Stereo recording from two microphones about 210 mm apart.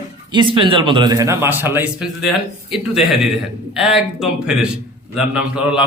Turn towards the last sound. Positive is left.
turn(degrees=-5)  # may be behind; listen again after turning